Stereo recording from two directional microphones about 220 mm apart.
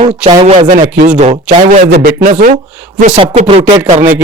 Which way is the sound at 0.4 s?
30° right (ahead or behind).